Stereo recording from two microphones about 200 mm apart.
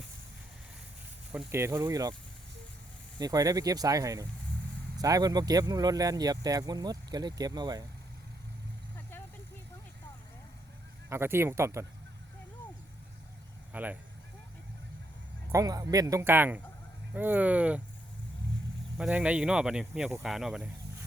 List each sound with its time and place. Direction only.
1.3 s speech: 10° right (ahead or behind)
3.2 s speech: 20° right (ahead or behind)
11.1 s speech: 10° right (ahead or behind)
13.7 s speech: 10° right (ahead or behind)
15.5 s speech: 20° right (ahead or behind)
18.9 s speech: 5° right (ahead or behind)